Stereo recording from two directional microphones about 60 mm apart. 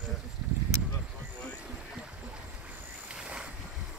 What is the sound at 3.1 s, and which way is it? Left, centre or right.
Boat, centre.